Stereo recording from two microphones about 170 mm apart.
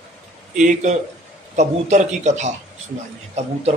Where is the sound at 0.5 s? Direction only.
45° right (ahead or behind).